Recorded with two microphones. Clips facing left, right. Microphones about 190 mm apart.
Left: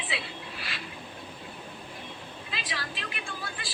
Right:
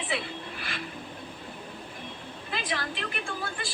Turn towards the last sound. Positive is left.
turn(degrees=-50)  # may be behind; listen again after turning